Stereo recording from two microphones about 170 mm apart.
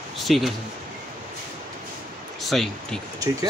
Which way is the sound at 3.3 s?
20° right (ahead or behind).